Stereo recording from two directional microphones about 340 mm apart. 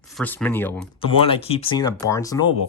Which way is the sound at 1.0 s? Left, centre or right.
Centre.